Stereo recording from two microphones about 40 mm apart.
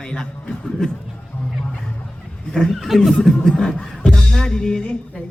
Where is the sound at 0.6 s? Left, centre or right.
Centre.